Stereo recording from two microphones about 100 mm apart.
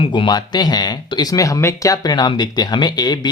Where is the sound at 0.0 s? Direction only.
55° left (ahead or behind).